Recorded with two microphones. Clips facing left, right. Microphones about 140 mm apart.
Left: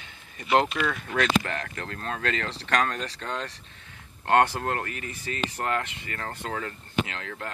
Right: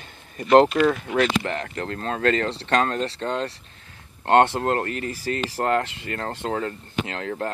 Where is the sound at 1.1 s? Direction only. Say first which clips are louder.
Right 3 dB; 30° right (ahead or behind).